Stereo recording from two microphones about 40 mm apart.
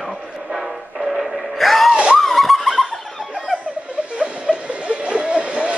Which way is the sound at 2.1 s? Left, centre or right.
Centre.